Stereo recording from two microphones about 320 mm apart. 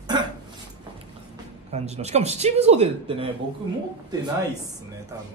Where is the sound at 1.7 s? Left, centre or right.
Centre.